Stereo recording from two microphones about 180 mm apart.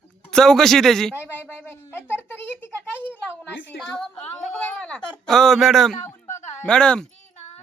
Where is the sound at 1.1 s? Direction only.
10° left (ahead or behind).